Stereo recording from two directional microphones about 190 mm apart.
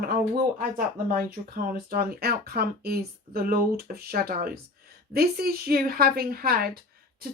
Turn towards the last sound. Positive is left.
turn(degrees=-50)  # may be behind; listen again after turning